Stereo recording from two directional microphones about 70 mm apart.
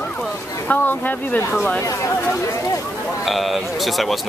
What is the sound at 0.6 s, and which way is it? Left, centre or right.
Speech, left.